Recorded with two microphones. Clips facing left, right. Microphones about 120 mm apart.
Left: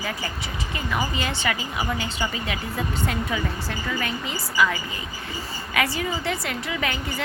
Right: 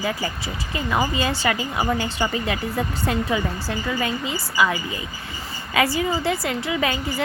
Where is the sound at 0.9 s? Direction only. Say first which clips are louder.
Right 5 dB; 30° right (ahead or behind).